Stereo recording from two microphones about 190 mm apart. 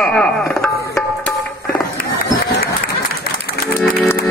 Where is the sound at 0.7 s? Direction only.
15° left (ahead or behind).